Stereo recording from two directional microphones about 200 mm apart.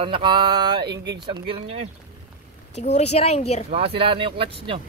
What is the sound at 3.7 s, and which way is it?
Speech, 30° right (ahead or behind).